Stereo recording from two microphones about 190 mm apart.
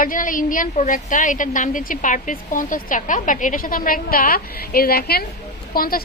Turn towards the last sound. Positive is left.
turn(degrees=50)  # may be behind; listen again after turning